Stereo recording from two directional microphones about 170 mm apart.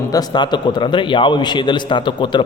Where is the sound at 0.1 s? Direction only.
25° left (ahead or behind).